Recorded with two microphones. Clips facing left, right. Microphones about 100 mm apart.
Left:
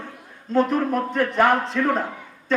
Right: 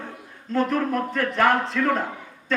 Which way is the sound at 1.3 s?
5° left (ahead or behind).